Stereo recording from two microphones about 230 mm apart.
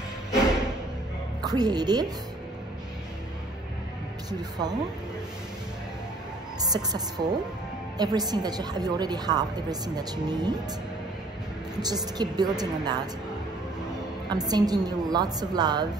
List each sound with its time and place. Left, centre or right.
1.4 s a woman's voice: centre
4.3 s a woman's voice: centre
6.6 s a woman's voice: centre
11.8 s a woman's voice: centre
14.3 s a woman's voice: centre